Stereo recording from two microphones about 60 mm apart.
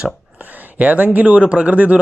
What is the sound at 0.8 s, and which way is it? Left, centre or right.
Speech, right.